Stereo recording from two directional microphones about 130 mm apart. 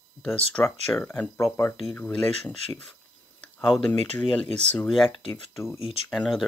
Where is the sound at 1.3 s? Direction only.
20° left (ahead or behind).